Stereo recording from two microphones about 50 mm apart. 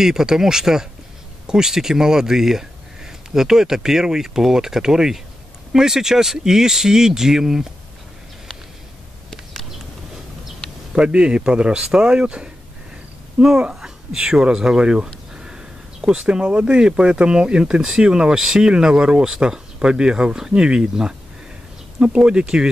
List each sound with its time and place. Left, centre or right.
0.0 s speech: centre
11.0 s speech: right
15.3 s a sound: centre
16.4 s speech: right